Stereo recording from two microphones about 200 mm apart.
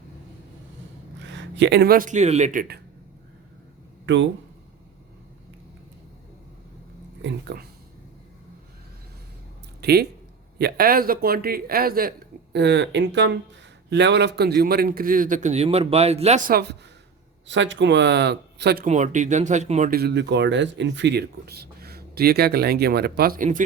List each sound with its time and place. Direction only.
1.2 s speech: 65° right (ahead or behind); by 2.8 s 45° right (ahead or behind)
4.0 s speech: 65° right (ahead or behind)
7.2 s speech: 60° right (ahead or behind)
9.8 s speech: 50° right (ahead or behind)
12.5 s speech: 60° right (ahead or behind); by 16.4 s 30° right (ahead or behind)
17.5 s speech: 65° right (ahead or behind)
18.9 s speech: 35° right (ahead or behind)
20.0 s speech: 55° right (ahead or behind); by 23.6 s 40° right (ahead or behind)